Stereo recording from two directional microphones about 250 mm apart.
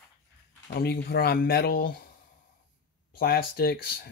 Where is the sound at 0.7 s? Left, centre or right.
Left.